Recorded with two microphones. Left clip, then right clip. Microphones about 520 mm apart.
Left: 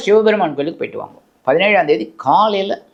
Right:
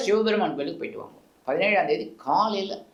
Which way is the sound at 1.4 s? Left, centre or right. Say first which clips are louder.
Left 10 dB; left.